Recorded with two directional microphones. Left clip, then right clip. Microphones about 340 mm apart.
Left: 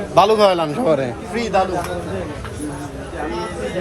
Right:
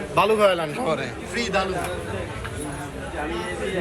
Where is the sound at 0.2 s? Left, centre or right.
Left.